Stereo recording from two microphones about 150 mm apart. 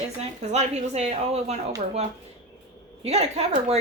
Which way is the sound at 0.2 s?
45° right (ahead or behind).